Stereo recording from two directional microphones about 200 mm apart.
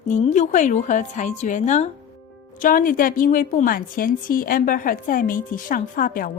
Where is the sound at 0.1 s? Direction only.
35° left (ahead or behind).